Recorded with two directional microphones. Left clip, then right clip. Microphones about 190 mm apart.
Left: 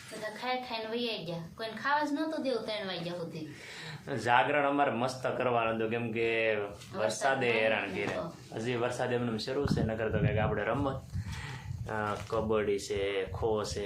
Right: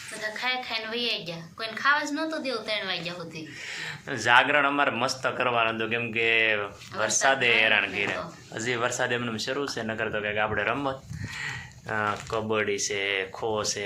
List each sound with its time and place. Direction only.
0.3 s a woman's voice: 25° left (ahead or behind)
4.1 s speech: 10° right (ahead or behind)